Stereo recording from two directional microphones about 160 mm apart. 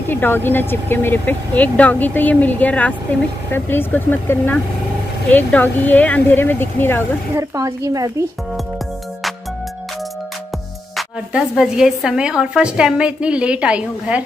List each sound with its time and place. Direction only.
0.1 s speech: 15° left (ahead or behind)
7.3 s speech: 20° right (ahead or behind)
11.0 s a woman's voice: 5° right (ahead or behind)